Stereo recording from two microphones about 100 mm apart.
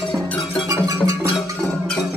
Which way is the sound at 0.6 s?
35° right (ahead or behind).